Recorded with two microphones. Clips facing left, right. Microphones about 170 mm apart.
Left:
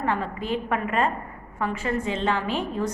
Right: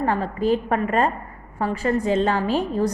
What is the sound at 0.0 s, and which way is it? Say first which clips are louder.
A woman's voice: right 5 dB; 40° right (ahead or behind).